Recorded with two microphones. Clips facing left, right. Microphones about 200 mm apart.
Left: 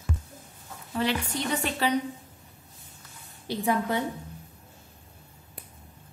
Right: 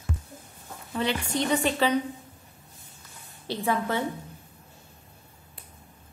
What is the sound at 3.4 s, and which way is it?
Speech, 15° left (ahead or behind).